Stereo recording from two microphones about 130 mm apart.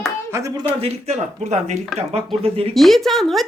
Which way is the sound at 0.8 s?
60° right (ahead or behind).